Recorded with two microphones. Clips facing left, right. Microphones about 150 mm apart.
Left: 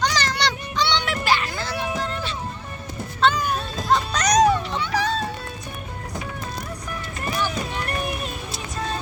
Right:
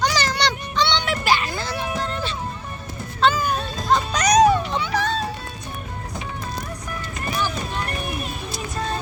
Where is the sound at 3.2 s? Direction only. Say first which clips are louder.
Right 1 dB; centre (ahead or behind).